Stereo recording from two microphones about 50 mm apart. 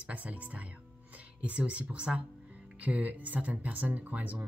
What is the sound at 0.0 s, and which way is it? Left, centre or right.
Speech, right.